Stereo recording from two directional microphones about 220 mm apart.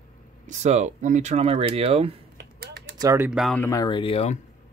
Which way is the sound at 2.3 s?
45° right (ahead or behind).